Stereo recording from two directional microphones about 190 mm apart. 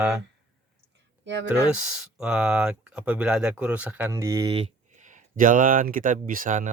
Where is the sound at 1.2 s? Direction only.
65° right (ahead or behind).